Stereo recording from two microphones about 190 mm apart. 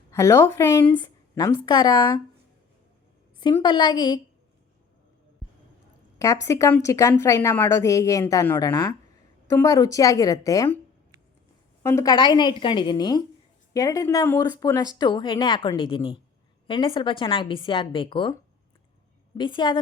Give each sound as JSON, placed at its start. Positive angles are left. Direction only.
{"t": 0.1, "sound": "a woman's voice", "side_deg": 15}
{"t": 0.9, "sound": "a sound", "side_deg": 20}
{"t": 1.6, "sound": "speech", "side_deg": 20}
{"t": 3.4, "sound": "speech", "side_deg": 25}
{"t": 6.1, "sound": "a woman's voice", "side_deg": 15}
{"t": 11.8, "sound": "speech", "side_deg": 15}
{"t": 19.4, "sound": "speech", "side_deg": 25}